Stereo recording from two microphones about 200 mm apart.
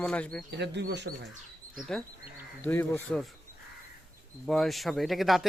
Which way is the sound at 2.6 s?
10° left (ahead or behind).